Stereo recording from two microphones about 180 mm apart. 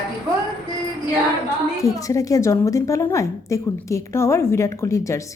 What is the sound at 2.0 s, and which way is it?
A woman's voice, 20° left (ahead or behind).